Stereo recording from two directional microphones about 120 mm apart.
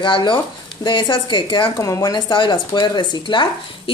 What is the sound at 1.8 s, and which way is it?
Speech, 30° left (ahead or behind).